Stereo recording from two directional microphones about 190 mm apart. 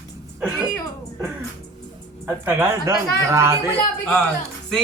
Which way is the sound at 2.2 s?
10° right (ahead or behind).